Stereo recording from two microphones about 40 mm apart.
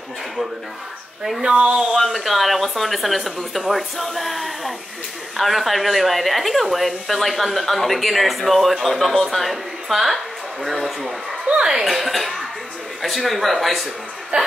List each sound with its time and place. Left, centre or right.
1.4 s speech: right
2.0 s speech: centre
14.3 s speech: right